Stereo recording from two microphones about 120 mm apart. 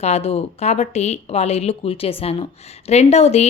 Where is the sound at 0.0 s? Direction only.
60° left (ahead or behind).